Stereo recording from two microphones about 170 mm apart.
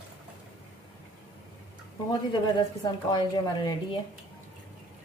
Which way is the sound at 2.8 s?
25° left (ahead or behind).